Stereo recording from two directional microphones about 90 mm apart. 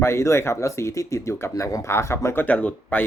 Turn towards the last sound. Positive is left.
turn(degrees=20)  # may be behind; listen again after turning